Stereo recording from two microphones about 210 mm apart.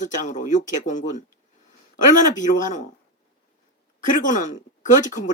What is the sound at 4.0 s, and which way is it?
Speech, 40° left (ahead or behind).